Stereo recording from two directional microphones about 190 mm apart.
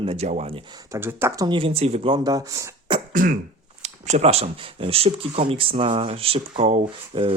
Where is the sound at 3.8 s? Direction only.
35° right (ahead or behind).